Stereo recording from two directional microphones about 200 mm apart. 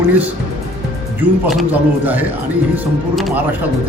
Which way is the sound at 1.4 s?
5° right (ahead or behind).